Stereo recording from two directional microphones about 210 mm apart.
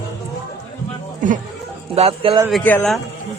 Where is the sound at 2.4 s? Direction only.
5° left (ahead or behind).